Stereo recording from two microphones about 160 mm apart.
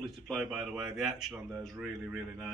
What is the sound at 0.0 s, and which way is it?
Speech, centre (ahead or behind).